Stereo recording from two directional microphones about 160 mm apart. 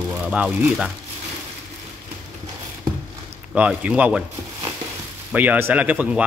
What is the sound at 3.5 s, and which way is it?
Speech, 10° right (ahead or behind).